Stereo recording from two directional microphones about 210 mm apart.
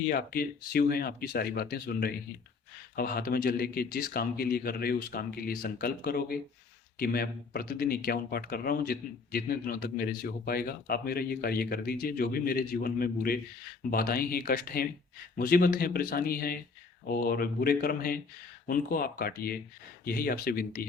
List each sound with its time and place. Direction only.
0.1 s speech: 45° left (ahead or behind)